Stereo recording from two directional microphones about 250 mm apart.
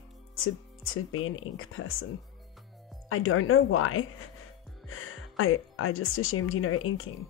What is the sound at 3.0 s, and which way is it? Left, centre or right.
Speech, left.